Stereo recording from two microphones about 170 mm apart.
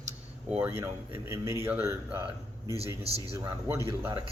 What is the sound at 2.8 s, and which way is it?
Speech, 35° right (ahead or behind).